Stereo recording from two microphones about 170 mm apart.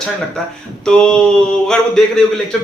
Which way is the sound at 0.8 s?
5° left (ahead or behind).